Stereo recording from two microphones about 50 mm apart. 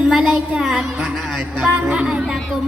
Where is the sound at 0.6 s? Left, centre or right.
Centre.